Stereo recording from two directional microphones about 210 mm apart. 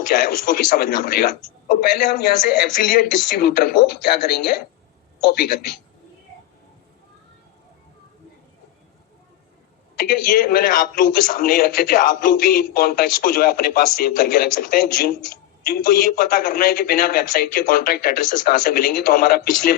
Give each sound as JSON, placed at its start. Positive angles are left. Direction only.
{"t": 0.1, "sound": "a man's voice", "side_deg": 40}
{"t": 10.0, "sound": "a man's voice", "side_deg": 45}